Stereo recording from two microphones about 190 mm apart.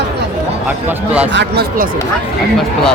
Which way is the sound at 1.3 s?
55° right (ahead or behind).